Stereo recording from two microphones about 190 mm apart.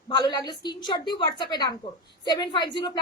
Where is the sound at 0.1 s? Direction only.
20° left (ahead or behind).